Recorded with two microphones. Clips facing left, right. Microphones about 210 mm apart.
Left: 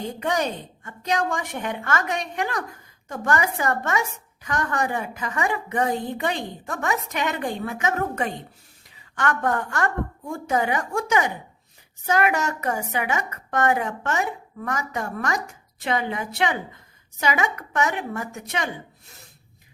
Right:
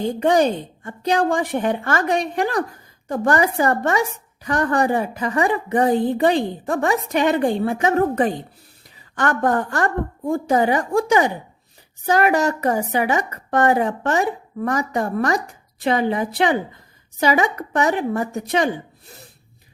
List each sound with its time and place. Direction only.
0.0 s a woman's voice: 30° right (ahead or behind)